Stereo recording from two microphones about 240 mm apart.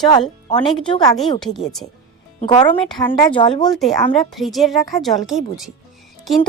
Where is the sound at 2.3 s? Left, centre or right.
Centre.